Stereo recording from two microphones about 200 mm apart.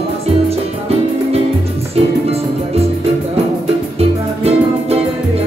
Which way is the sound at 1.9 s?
30° right (ahead or behind).